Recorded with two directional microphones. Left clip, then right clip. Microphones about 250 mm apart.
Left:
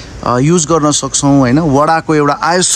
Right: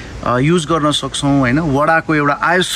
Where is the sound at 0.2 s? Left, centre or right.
Centre.